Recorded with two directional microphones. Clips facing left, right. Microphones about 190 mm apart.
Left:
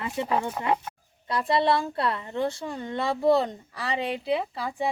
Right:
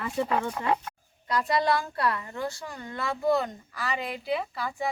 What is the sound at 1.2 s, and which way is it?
A woman's voice, 25° left (ahead or behind).